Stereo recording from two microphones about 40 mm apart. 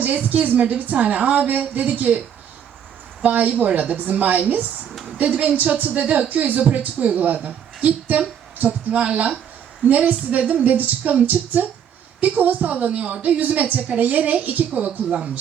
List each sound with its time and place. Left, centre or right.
0.0 s a woman's voice: right
3.2 s a woman's voice: right
9.8 s a woman's voice: right
13.4 s a woman's voice: right